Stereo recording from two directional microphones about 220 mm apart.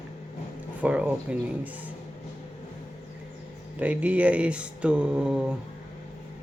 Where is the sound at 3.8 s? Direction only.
5° right (ahead or behind).